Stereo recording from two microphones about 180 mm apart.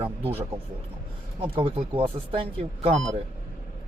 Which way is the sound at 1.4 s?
30° right (ahead or behind).